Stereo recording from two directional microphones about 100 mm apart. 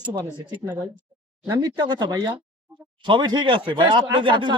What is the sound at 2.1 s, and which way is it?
Speech, 40° right (ahead or behind).